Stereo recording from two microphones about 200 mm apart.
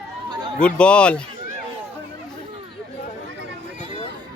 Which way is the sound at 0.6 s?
5° left (ahead or behind).